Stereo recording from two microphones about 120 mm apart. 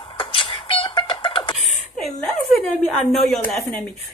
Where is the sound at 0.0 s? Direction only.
45° left (ahead or behind).